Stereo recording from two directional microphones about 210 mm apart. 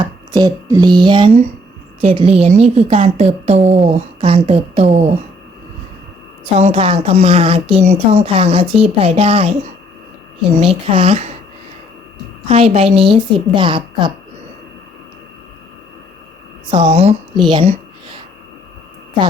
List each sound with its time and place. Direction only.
0.0 s a woman's voice: 20° right (ahead or behind)
6.4 s a woman's voice: 30° right (ahead or behind)
10.6 s a woman's voice: 25° right (ahead or behind)
12.5 s a woman's voice: 30° right (ahead or behind)
16.7 s a woman's voice: 25° right (ahead or behind)